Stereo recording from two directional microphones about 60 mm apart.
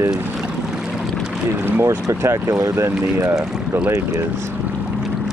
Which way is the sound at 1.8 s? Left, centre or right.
Right.